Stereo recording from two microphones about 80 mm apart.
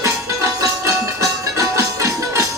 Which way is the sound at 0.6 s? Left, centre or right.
Right.